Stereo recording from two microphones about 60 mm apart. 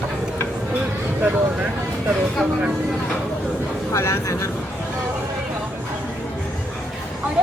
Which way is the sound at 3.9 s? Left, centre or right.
Left.